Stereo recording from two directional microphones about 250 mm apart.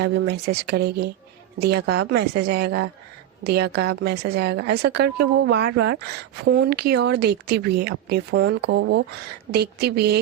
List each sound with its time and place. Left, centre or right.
0.0 s speech: right